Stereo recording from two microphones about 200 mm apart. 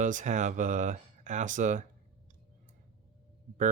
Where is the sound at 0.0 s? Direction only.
40° right (ahead or behind).